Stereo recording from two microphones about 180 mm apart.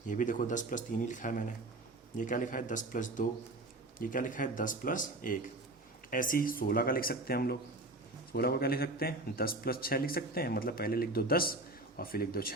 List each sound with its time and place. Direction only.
0.1 s a man's voice: 45° left (ahead or behind)